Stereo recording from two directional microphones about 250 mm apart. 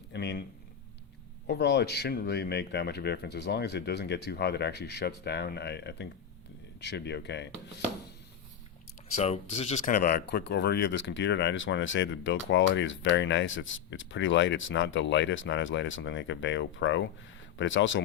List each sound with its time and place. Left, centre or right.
0.1 s a sound: left
1.5 s speech: left
9.1 s speech: left